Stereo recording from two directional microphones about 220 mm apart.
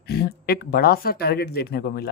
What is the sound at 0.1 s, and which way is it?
Speech, 45° left (ahead or behind).